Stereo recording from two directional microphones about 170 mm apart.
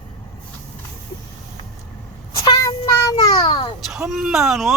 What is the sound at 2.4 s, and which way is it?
Child singing, 20° left (ahead or behind).